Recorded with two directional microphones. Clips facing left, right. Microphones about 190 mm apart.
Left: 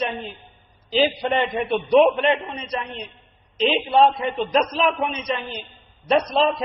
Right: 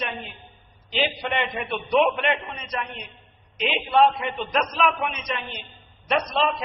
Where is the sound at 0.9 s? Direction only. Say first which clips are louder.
Left 6 dB; 35° left (ahead or behind).